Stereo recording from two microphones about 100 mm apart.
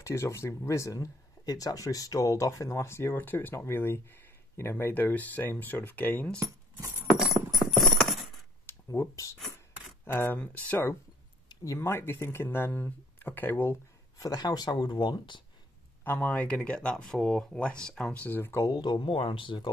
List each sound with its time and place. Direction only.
0.0 s speech: 30° left (ahead or behind)
7.2 s clip-clop: centre (ahead or behind)
8.6 s a sound: 25° left (ahead or behind)
10.0 s speech: 20° left (ahead or behind)
11.4 s speech: 35° left (ahead or behind)
14.2 s speech: 40° left (ahead or behind)
16.0 s speech: 15° left (ahead or behind)
18.6 s speech: 45° left (ahead or behind)
19.1 s speech: 60° left (ahead or behind)